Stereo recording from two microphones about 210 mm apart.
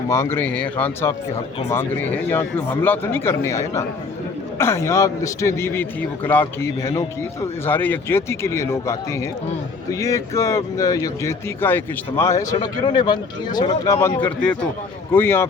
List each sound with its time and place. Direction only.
0.1 s a man's voice: 15° left (ahead or behind)